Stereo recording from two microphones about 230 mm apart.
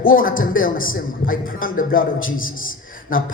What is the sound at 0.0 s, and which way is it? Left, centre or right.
Speech, left.